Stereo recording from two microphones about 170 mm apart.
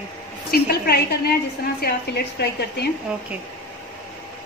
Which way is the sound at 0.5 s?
65° left (ahead or behind).